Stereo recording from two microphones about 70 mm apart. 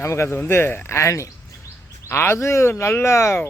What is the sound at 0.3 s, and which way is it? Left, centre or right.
Speech, left.